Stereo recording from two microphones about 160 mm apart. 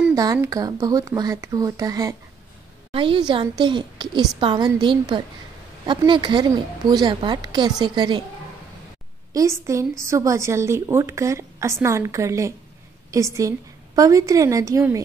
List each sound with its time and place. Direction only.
0.1 s a woman's voice: 20° right (ahead or behind)
2.9 s a woman's voice: 35° right (ahead or behind)
9.3 s a woman's voice: 20° right (ahead or behind)